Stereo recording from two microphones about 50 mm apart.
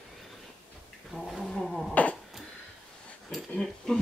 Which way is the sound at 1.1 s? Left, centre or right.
Centre.